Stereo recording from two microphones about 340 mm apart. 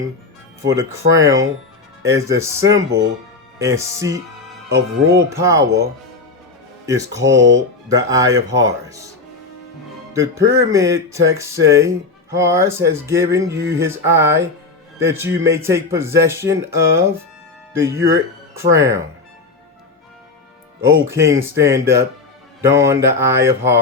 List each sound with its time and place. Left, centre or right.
0.6 s speech: centre
4.7 s speech: right
5.3 s speech: centre
10.2 s speech: centre
20.8 s speech: centre